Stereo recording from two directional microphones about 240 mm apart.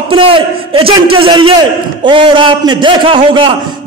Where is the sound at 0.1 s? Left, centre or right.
Right.